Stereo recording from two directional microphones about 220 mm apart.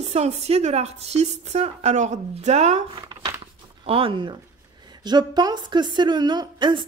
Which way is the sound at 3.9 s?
25° right (ahead or behind).